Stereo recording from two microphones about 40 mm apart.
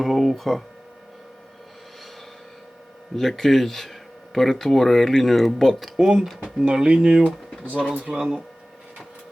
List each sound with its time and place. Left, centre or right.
0.0 s speech: centre
3.2 s speech: centre
6.0 s speech: centre
7.6 s speech: right